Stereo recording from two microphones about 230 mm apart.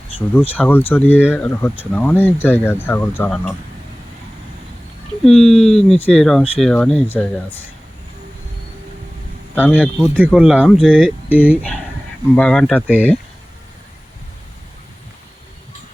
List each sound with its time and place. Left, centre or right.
0.2 s speech: centre
5.2 s speech: centre
5.5 s speech: left
5.9 s speech: centre
9.6 s speech: centre
9.8 s speech: centre
11.3 s speech: centre